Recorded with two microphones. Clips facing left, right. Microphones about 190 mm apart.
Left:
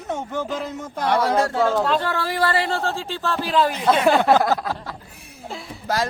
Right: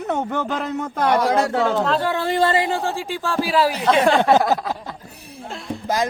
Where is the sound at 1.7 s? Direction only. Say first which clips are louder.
Even; centre (ahead or behind).